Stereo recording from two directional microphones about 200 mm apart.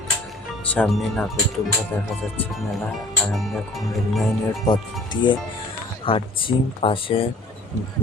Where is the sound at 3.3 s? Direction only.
Centre (ahead or behind).